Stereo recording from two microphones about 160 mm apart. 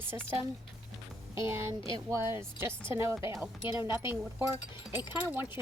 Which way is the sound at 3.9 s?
15° right (ahead or behind).